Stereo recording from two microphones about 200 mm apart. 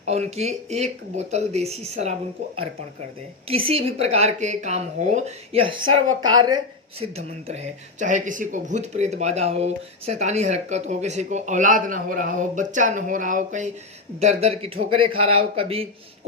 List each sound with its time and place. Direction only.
0.0 s speech: 35° right (ahead or behind)
3.5 s speech: 30° right (ahead or behind)
5.9 s speech: 90° right
6.3 s a man's voice: 20° right (ahead or behind)
7.0 s a man's voice: 30° right (ahead or behind)